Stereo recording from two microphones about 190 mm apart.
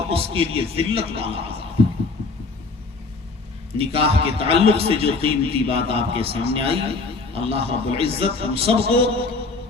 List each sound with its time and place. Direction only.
0.1 s a man's voice: 30° right (ahead or behind)
3.8 s a man's voice: 30° right (ahead or behind)